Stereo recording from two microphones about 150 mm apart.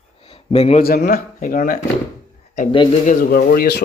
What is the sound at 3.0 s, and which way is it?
Speech, 60° left (ahead or behind).